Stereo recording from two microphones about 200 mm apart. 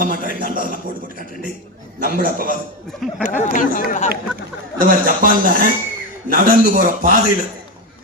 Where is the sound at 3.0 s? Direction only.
Centre (ahead or behind).